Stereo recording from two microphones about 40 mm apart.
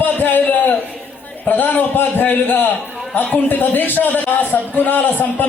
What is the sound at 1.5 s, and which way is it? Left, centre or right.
A man's voice, left.